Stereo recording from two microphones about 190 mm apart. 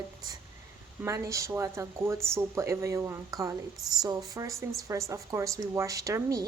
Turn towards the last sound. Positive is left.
turn(degrees=-15)  # may be behind; listen again after turning